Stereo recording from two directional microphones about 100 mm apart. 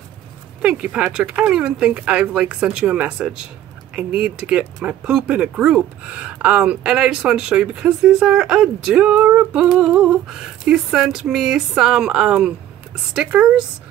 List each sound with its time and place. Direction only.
0.6 s speech: 10° right (ahead or behind)